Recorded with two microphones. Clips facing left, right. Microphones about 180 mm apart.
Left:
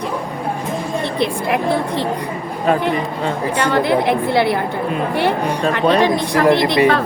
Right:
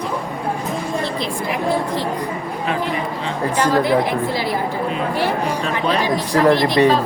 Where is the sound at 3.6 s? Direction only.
65° left (ahead or behind).